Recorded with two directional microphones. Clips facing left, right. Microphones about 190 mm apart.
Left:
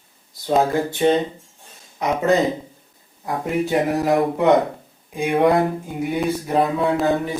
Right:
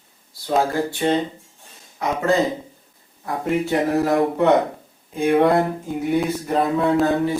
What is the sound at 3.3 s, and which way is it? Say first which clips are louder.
Speech: even; 15° left (ahead or behind).